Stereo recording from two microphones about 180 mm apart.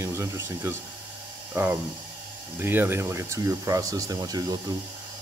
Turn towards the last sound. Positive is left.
turn(degrees=-20)  # may be behind; listen again after turning